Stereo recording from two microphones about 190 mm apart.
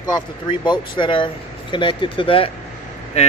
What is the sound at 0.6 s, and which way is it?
Speech, 25° left (ahead or behind).